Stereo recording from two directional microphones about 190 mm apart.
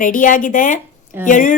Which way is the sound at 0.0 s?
45° left (ahead or behind).